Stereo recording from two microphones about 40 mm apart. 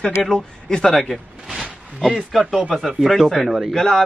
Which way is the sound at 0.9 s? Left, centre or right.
Centre.